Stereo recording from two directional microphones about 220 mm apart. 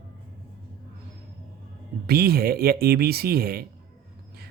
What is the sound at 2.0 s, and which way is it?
Speech, 45° right (ahead or behind).